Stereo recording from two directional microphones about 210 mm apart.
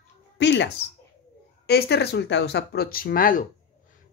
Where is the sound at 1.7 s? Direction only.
50° left (ahead or behind).